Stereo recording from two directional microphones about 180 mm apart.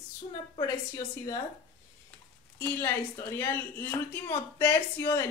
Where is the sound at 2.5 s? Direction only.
15° left (ahead or behind).